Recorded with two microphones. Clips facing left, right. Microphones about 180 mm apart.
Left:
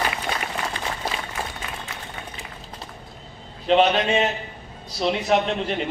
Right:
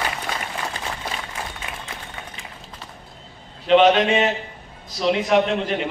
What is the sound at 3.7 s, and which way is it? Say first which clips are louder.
Speech: right 2 dB; 35° left (ahead or behind).